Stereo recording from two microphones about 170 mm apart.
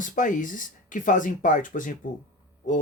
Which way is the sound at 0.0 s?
50° left (ahead or behind).